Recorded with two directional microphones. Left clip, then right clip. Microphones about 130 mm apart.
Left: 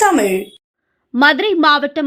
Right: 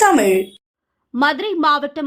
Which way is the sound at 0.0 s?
Centre (ahead or behind).